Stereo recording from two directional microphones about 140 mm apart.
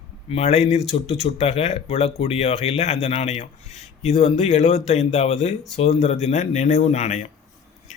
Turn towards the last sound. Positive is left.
turn(degrees=55)  # may be behind; listen again after turning